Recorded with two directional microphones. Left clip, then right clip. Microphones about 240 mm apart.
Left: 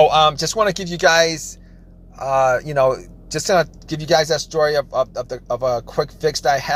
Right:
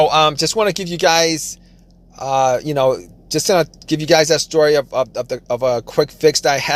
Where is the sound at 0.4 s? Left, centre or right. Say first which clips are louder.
Right 2 dB; right.